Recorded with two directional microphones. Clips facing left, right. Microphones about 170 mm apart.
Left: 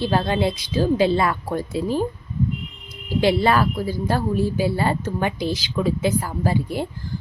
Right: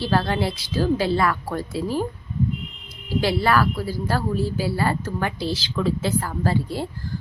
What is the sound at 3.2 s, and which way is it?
A woman's voice, 20° left (ahead or behind).